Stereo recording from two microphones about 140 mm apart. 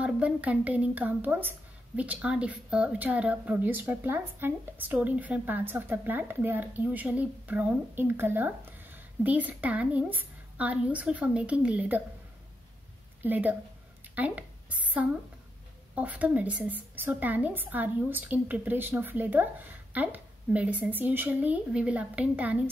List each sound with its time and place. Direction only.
0.0 s a woman's voice: 10° right (ahead or behind)
13.2 s a woman's voice: 10° right (ahead or behind)
14.1 s a sound: 10° right (ahead or behind)
15.9 s a woman's voice: 10° right (ahead or behind)